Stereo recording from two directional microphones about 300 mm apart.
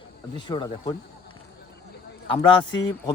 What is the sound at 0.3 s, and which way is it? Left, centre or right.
Speech, centre.